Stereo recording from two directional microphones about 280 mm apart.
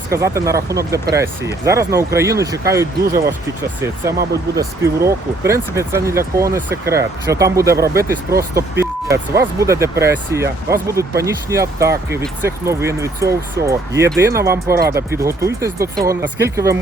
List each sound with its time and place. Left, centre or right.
0.1 s speech: centre
4.8 s speech: centre
8.5 s vehicle: centre
9.4 s speech: centre